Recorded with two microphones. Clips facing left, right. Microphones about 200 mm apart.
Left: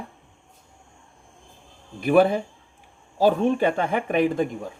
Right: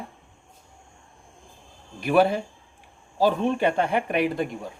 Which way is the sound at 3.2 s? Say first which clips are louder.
Left 3 dB; 50° left (ahead or behind).